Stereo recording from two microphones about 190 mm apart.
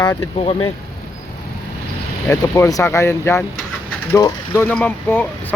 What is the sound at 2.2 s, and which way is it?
Mechanisms, 15° left (ahead or behind).